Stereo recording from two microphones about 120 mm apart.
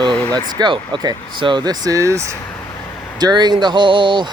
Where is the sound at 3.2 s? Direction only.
35° right (ahead or behind).